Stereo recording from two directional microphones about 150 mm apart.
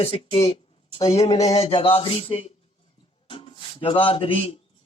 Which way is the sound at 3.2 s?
35° left (ahead or behind).